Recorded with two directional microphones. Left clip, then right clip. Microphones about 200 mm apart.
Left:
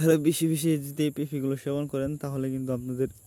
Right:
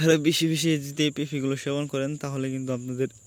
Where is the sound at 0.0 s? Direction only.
10° left (ahead or behind).